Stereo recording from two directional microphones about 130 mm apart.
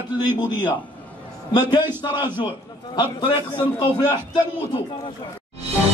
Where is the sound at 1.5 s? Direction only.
35° left (ahead or behind).